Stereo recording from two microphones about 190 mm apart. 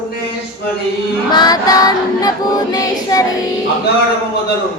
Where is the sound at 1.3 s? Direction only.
20° left (ahead or behind).